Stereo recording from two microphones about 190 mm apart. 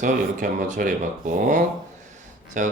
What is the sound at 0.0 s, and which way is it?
Speech, 40° right (ahead or behind).